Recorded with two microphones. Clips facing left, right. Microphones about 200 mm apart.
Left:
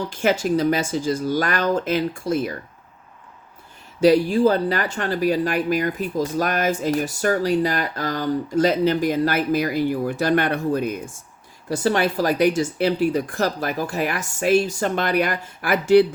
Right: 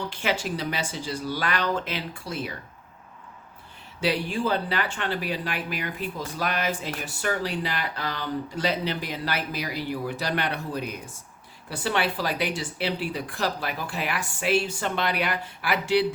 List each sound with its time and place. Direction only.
0.1 s speech: 45° left (ahead or behind)
4.0 s speech: 40° left (ahead or behind)